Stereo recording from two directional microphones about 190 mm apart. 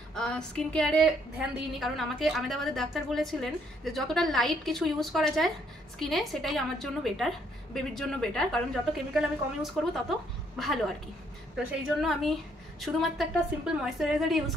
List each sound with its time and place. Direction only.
0.1 s a woman's voice: 5° left (ahead or behind)